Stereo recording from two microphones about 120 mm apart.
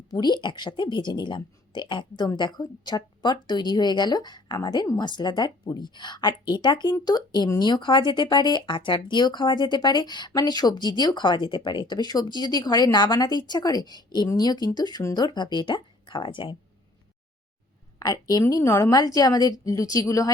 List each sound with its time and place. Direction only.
0.1 s speech: 35° left (ahead or behind)
18.0 s a woman's voice: 30° left (ahead or behind)